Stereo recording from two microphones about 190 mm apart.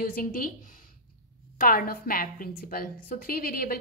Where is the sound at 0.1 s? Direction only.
50° left (ahead or behind).